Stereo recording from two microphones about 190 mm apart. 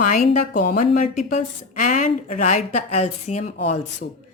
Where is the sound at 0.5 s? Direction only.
45° left (ahead or behind).